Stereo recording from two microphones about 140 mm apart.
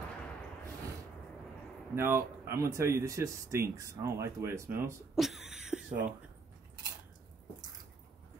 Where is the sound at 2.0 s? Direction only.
15° right (ahead or behind).